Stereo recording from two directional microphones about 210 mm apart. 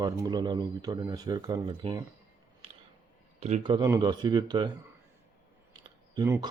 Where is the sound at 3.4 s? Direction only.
25° right (ahead or behind).